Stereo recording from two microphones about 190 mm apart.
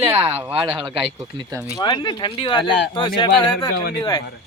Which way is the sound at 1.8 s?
25° left (ahead or behind).